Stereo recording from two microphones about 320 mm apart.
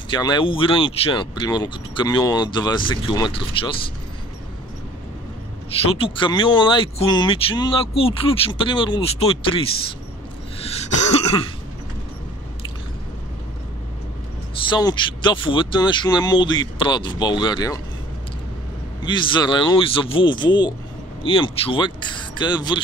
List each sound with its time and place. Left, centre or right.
0.1 s speech: centre
5.9 s speech: centre
10.6 s throat clearing: centre
14.7 s speech: centre
19.0 s speech: centre